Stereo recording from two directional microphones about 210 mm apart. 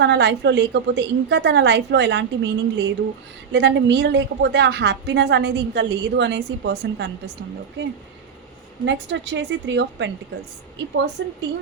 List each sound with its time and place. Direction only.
0.0 s a woman's voice: 55° right (ahead or behind)
8.8 s a woman's voice: 60° right (ahead or behind)
11.2 s a woman's voice: 60° right (ahead or behind)